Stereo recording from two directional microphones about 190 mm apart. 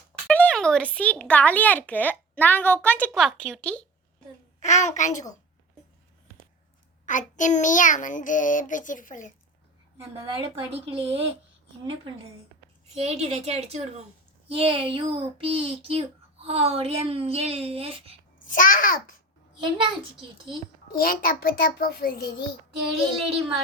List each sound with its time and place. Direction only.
0.3 s a sound: 5° left (ahead or behind)
0.9 s a woman's voice: 5° left (ahead or behind)
4.6 s a child's voice: 40° left (ahead or behind)
7.0 s child singing: 40° left (ahead or behind)
10.0 s a woman's voice: 30° right (ahead or behind)
12.9 s speech: 35° right (ahead or behind)
18.4 s child singing: 45° left (ahead or behind)
19.5 s a woman's voice: 25° right (ahead or behind)
20.9 s child singing: 50° left (ahead or behind)